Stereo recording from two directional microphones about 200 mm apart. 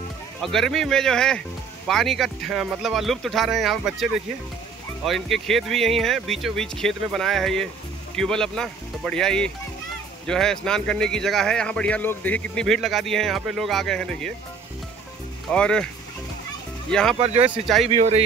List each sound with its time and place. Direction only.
0.4 s speech: centre (ahead or behind)
15.5 s speech: 5° left (ahead or behind)
16.9 s speech: 5° left (ahead or behind)
17.2 s speech: 30° right (ahead or behind)